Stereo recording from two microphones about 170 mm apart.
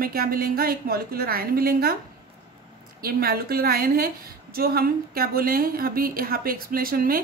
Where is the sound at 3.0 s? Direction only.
60° right (ahead or behind).